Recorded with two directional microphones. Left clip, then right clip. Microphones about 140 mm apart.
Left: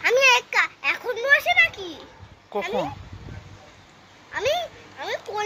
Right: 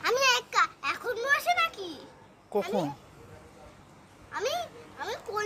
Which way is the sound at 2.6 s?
35° right (ahead or behind).